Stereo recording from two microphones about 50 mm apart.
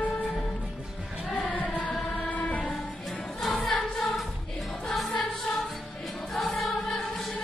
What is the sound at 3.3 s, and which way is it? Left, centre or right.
Choir, centre.